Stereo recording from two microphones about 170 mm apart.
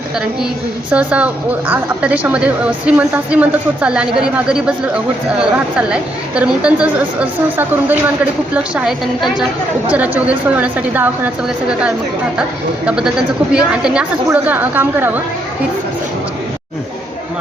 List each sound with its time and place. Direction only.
0.9 s a woman's voice: 5° right (ahead or behind)